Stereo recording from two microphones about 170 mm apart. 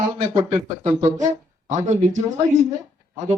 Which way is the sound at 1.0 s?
45° right (ahead or behind).